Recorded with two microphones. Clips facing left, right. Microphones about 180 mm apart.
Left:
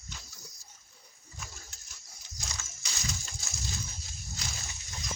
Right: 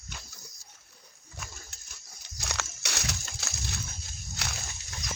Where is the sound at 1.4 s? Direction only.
65° right (ahead or behind).